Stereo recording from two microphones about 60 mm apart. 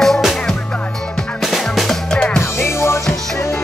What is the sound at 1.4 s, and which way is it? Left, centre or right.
Music, centre.